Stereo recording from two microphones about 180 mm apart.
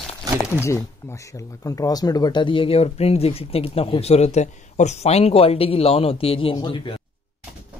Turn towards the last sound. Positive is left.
turn(degrees=30)  # may be behind; listen again after turning